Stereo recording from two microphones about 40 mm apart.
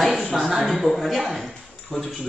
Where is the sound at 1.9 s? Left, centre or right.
Left.